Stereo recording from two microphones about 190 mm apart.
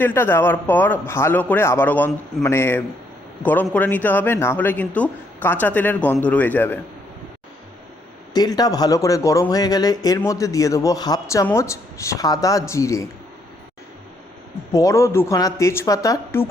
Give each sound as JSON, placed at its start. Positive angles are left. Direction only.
{"t": 0.0, "sound": "speech", "side_deg": 10}
{"t": 8.3, "sound": "speech", "side_deg": 20}
{"t": 14.7, "sound": "speech", "side_deg": 15}